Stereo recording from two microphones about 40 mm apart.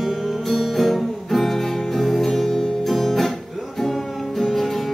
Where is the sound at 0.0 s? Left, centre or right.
Centre.